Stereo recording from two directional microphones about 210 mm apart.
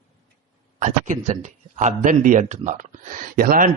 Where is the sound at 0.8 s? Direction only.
35° right (ahead or behind).